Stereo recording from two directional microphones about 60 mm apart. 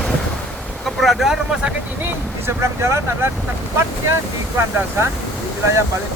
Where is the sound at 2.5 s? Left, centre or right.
Right.